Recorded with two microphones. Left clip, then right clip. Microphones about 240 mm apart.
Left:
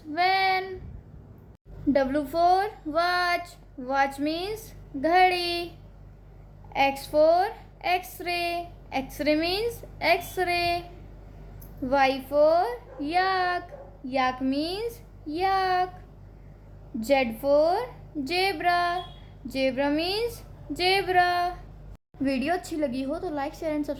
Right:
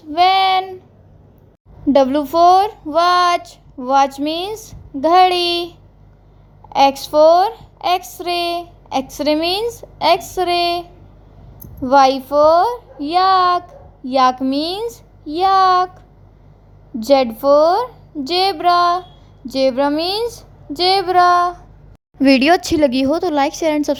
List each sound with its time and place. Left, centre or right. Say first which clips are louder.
0.1 s a sound: right 10 dB; right
1.9 s a woman's voice: right 11 dB; right
6.7 s a woman's voice: right 10 dB; right
11.9 s a woman's voice: right 12 dB; right
17.0 s a woman's voice: right 10 dB; right
22.2 s a woman's voice: right 15 dB; right